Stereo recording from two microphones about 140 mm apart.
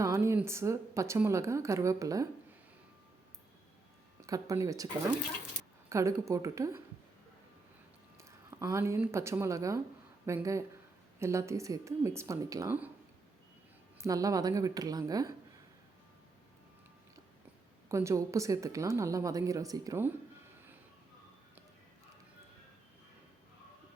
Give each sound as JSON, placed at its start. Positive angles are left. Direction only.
{"t": 0.0, "sound": "a sound", "side_deg": -20}
{"t": 0.4, "sound": "a woman's voice", "side_deg": -20}
{"t": 4.2, "sound": "a woman's voice", "side_deg": -25}
{"t": 8.2, "sound": "a woman's voice", "side_deg": -20}
{"t": 14.0, "sound": "a woman's voice", "side_deg": -25}
{"t": 17.8, "sound": "a woman's voice", "side_deg": -20}